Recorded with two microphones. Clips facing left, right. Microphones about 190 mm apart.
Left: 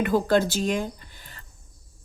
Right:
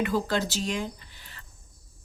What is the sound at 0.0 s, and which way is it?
Speech, 50° left (ahead or behind).